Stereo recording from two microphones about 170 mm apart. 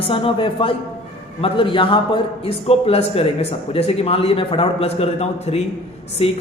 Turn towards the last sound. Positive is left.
turn(degrees=35)  # may be behind; listen again after turning